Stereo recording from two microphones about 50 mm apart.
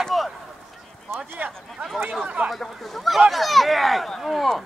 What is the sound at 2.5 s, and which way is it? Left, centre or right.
Speech, centre.